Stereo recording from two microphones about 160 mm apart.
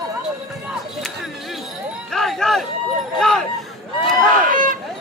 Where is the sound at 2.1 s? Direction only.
Centre (ahead or behind).